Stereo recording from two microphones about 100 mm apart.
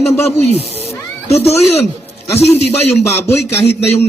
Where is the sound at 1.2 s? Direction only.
90° left.